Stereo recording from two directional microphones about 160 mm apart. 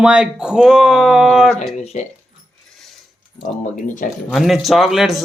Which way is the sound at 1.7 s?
45° left (ahead or behind).